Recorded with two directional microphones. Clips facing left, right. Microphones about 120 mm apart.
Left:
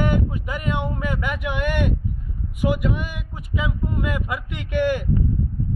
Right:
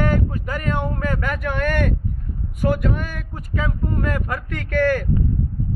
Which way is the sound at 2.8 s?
10° left (ahead or behind).